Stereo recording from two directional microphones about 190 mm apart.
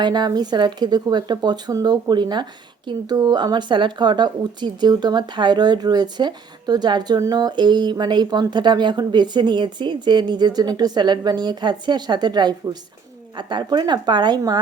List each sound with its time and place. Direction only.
0.0 s speech: 20° right (ahead or behind)